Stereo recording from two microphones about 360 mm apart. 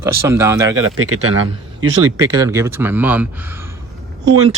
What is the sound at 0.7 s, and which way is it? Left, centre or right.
Speech, right.